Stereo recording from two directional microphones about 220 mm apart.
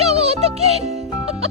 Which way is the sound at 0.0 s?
30° right (ahead or behind).